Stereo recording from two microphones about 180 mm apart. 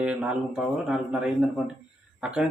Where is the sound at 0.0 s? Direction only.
5° right (ahead or behind).